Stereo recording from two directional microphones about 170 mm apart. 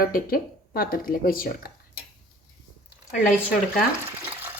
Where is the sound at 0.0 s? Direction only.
60° left (ahead or behind).